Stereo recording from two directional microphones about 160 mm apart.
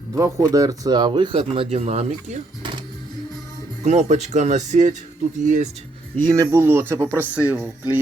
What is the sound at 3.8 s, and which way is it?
Speech, 45° right (ahead or behind).